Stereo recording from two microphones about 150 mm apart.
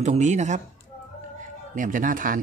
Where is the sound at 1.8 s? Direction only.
60° right (ahead or behind).